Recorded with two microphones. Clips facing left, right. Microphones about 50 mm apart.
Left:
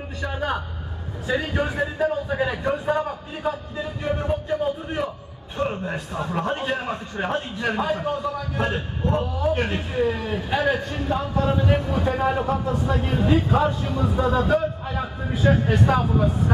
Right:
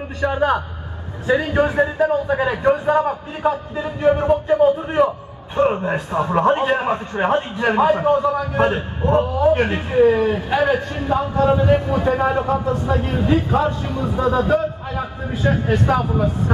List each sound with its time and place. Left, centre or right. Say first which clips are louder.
0.2 s a man's voice: right 9 dB; centre